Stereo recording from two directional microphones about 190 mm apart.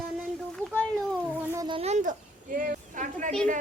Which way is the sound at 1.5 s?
20° right (ahead or behind).